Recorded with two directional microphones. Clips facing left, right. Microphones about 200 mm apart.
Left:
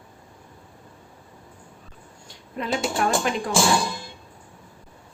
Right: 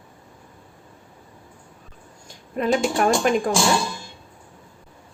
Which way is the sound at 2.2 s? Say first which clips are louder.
Right 8 dB; 45° right (ahead or behind).